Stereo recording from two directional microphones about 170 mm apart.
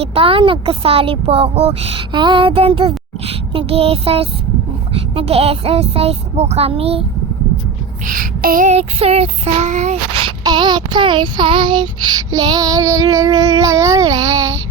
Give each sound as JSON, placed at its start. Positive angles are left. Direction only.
{"t": 0.0, "sound": "speech", "side_deg": -35}
{"t": 8.0, "sound": "child singing", "side_deg": -55}